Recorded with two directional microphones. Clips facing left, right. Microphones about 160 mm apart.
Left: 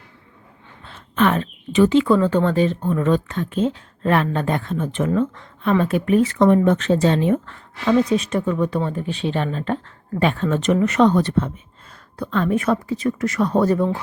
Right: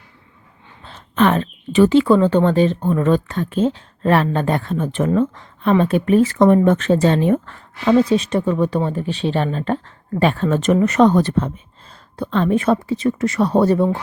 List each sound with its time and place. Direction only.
0.9 s a sound: 35° right (ahead or behind)
1.7 s speech: 45° right (ahead or behind)
2.9 s speech: 45° right (ahead or behind); by 6.1 s 30° right (ahead or behind)
6.3 s speech: 45° right (ahead or behind)
7.9 s speech: 30° right (ahead or behind)
12.1 s speech: 25° right (ahead or behind)